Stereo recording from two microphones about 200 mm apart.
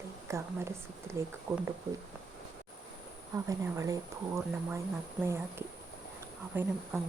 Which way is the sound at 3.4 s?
15° right (ahead or behind).